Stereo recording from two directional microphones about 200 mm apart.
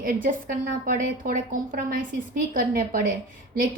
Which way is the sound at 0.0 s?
45° right (ahead or behind).